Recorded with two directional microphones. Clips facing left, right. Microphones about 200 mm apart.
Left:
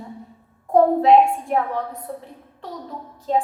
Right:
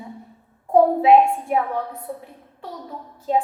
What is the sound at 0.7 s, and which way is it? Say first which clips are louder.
Speech: even; 5° right (ahead or behind).